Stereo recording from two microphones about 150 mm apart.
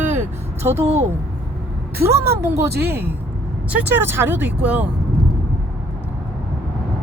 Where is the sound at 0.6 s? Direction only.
15° right (ahead or behind).